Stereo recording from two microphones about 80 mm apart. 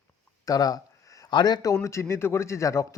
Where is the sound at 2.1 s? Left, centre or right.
Left.